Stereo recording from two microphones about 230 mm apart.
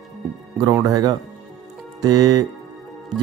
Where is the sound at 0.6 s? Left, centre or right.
Centre.